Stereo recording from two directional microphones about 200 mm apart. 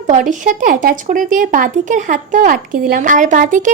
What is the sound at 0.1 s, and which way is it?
Speech, 40° right (ahead or behind).